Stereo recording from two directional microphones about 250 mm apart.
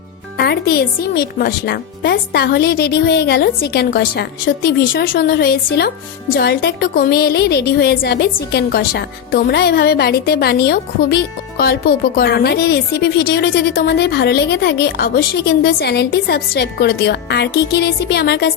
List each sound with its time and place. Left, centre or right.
0.3 s speech: left